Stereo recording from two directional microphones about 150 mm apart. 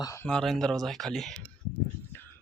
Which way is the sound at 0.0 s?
20° left (ahead or behind).